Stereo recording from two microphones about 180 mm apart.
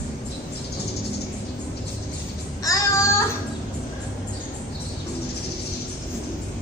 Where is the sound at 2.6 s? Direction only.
15° left (ahead or behind).